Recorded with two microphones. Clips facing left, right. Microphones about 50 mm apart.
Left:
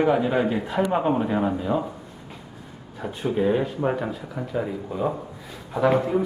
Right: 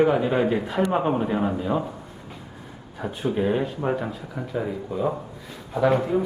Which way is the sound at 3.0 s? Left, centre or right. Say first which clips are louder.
Left 1 dB; centre.